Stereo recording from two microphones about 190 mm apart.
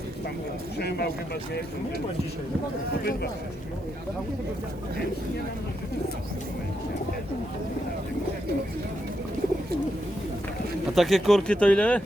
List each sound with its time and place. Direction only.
0.8 s speech: 55° left (ahead or behind)
10.9 s speech: centre (ahead or behind)